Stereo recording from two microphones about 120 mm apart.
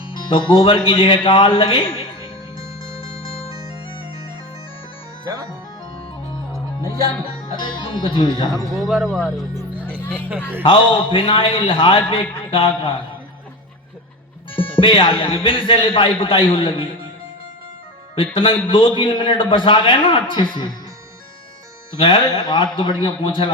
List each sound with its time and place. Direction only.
0.3 s a man's voice: 45° left (ahead or behind)
2.6 s music: 50° left (ahead or behind)
5.2 s music: 30° right (ahead or behind)
7.6 s a man's voice: 45° left (ahead or behind)
8.7 s speech: centre (ahead or behind)
10.6 s a man's voice: 45° left (ahead or behind)
14.5 s a man's voice: 45° left (ahead or behind)
18.1 s a man's voice: 45° left (ahead or behind)
22.0 s a man's voice: 45° left (ahead or behind)